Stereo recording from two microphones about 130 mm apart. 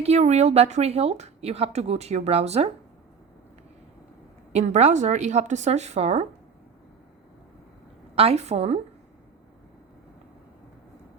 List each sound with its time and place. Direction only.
0.0 s a woman's voice: 55° right (ahead or behind)
4.5 s a woman's voice: 60° right (ahead or behind)
8.1 s a woman's voice: 50° right (ahead or behind)